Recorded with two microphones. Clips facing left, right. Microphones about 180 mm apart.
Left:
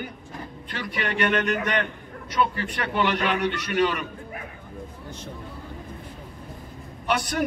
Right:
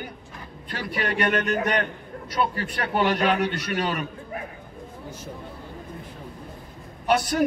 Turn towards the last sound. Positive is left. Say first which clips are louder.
# right 4 dB
turn(degrees=-35)  # may be behind; listen again after turning